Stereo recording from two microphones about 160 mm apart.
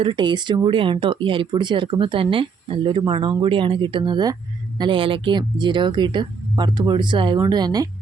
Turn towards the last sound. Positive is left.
turn(degrees=-25)  # may be behind; listen again after turning